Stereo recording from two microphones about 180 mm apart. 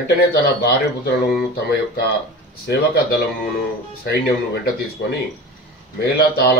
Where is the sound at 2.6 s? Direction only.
60° left (ahead or behind).